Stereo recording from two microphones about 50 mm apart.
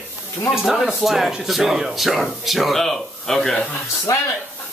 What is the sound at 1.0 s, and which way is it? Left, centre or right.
Speech, centre.